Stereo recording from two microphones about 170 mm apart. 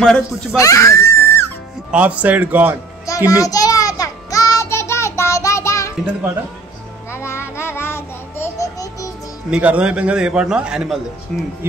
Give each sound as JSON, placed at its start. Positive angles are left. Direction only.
{"t": 0.0, "sound": "a man's voice", "side_deg": 5}
{"t": 0.6, "sound": "music", "side_deg": 20}
{"t": 1.9, "sound": "a man's voice", "side_deg": -10}
{"t": 3.3, "sound": "child singing", "side_deg": 20}
{"t": 7.1, "sound": "music", "side_deg": 15}
{"t": 9.5, "sound": "a man's voice", "side_deg": -5}